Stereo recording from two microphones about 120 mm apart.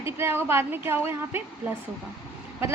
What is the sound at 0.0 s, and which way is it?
A woman's voice, 20° right (ahead or behind).